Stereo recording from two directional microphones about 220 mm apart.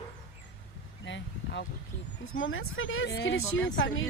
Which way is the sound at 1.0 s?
55° left (ahead or behind).